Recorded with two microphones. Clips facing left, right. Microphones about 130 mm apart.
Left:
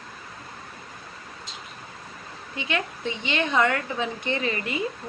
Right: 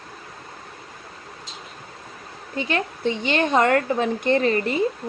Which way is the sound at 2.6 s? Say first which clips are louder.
Right 4 dB; 40° right (ahead or behind).